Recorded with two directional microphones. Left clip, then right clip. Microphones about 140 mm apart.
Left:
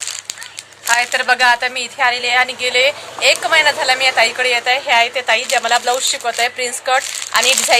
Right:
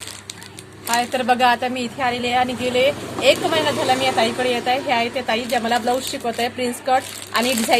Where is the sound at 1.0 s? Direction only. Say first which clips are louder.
Left 2 dB; 10° left (ahead or behind).